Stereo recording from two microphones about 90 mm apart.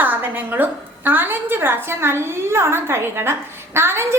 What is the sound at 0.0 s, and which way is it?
A woman's voice, 20° right (ahead or behind).